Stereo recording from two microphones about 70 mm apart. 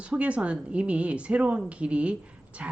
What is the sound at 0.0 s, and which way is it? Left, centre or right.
Speech, centre.